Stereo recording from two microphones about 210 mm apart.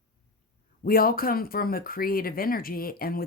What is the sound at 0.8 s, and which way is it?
Speech, 45° left (ahead or behind).